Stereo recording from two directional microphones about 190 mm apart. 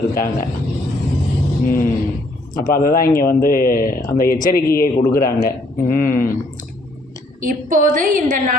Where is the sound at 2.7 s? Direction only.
50° left (ahead or behind).